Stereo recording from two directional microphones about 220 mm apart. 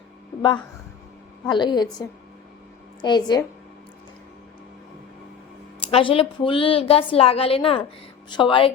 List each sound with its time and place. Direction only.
1.5 s a woman's voice: 20° left (ahead or behind)
5.8 s a woman's voice: 25° left (ahead or behind)